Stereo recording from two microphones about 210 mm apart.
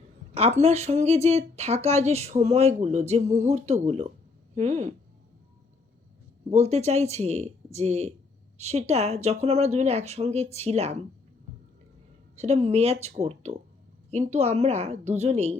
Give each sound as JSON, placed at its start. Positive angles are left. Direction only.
{"t": 0.3, "sound": "speech", "side_deg": -30}
{"t": 6.5, "sound": "speech", "side_deg": -30}
{"t": 12.4, "sound": "speech", "side_deg": -30}